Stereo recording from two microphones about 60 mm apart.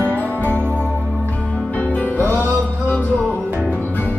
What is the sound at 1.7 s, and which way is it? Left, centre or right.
Music, left.